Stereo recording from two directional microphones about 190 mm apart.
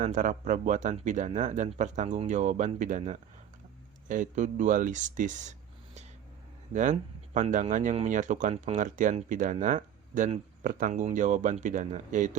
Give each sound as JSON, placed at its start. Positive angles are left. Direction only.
{"t": 0.0, "sound": "speech", "side_deg": -45}